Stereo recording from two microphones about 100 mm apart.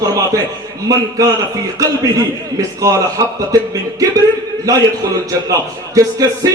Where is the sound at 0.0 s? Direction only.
35° right (ahead or behind).